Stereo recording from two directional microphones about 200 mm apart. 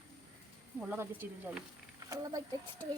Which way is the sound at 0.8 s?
5° right (ahead or behind).